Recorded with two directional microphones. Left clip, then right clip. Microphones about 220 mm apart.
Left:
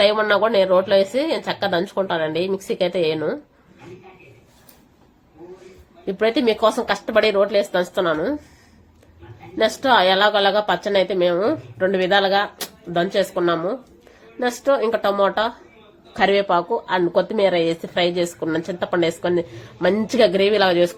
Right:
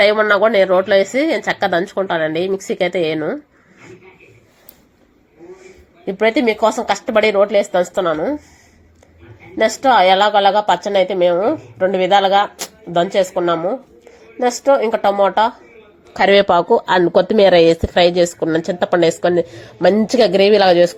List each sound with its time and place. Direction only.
0.0 s a woman's voice: 15° right (ahead or behind)
6.1 s a woman's voice: 10° right (ahead or behind)
9.6 s a woman's voice: 10° right (ahead or behind)
16.1 s speech: 30° right (ahead or behind)